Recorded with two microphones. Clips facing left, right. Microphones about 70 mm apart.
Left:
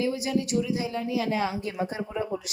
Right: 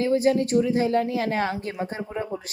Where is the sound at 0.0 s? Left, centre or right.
Right.